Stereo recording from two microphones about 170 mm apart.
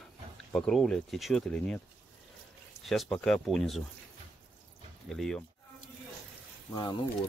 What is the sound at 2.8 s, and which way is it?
Speech, centre (ahead or behind).